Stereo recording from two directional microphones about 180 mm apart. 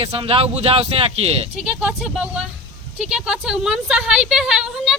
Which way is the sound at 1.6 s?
5° right (ahead or behind).